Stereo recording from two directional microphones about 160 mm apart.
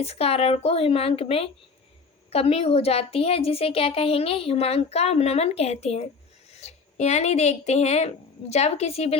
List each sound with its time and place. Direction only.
0.0 s a woman's voice: 40° left (ahead or behind)